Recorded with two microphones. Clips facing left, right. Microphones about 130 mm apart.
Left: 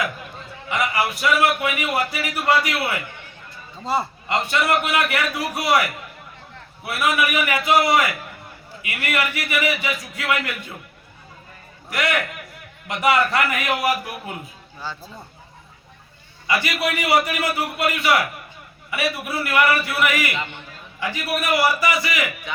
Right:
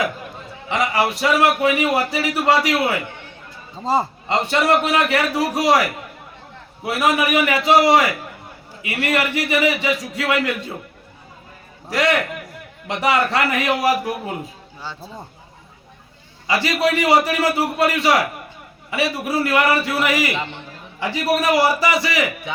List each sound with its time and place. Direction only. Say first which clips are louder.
0.7 s a man's voice: right 3 dB; 30° right (ahead or behind)
6.9 s a man's voice: right 3 dB; 35° right (ahead or behind)
12.9 s a man's voice: right 1 dB; 35° right (ahead or behind)
16.5 s a man's voice: right 4 dB; 30° right (ahead or behind)